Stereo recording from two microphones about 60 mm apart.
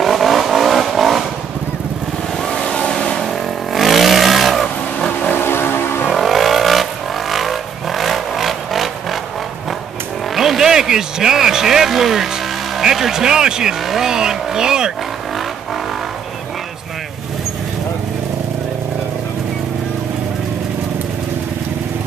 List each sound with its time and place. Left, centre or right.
0.0 s vehicle: centre
2.4 s vehicle: centre
3.7 s vehicle: centre
5.3 s vehicle: left
6.0 s vehicle: centre
10.3 s speech: centre